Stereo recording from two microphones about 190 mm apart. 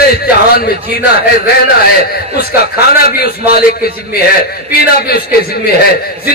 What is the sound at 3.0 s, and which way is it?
A man's voice, 55° left (ahead or behind).